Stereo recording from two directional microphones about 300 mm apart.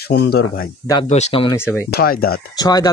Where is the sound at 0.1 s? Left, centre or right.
Left.